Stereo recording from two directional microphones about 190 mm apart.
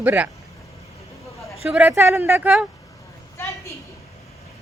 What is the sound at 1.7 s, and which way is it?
Speech, 10° right (ahead or behind).